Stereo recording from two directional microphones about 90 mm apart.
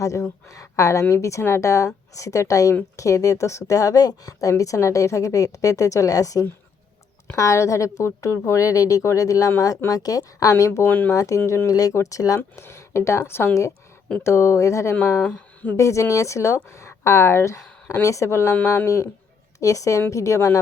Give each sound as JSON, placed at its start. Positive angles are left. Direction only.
{"t": 0.0, "sound": "a woman's voice", "side_deg": 35}
{"t": 10.8, "sound": "speech", "side_deg": 20}
{"t": 11.1, "sound": "a woman's voice", "side_deg": 35}
{"t": 12.4, "sound": "a woman's voice", "side_deg": 30}